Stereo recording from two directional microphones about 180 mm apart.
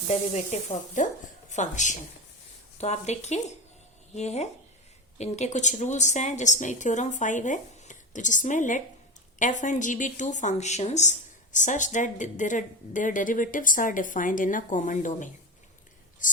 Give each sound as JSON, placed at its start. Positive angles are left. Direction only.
{"t": 0.1, "sound": "sizzle", "side_deg": 35}
{"t": 1.5, "sound": "a woman's voice", "side_deg": 40}
{"t": 2.7, "sound": "sizzle", "side_deg": 40}
{"t": 5.1, "sound": "a woman's voice", "side_deg": 40}
{"t": 16.2, "sound": "whispering", "side_deg": 45}